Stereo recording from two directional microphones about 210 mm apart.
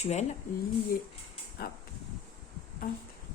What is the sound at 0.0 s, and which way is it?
Speech, 30° left (ahead or behind).